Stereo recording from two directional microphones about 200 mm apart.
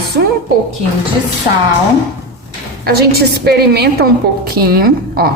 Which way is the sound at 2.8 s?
50° right (ahead or behind).